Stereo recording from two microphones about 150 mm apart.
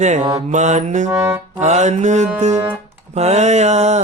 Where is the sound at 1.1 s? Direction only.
15° right (ahead or behind).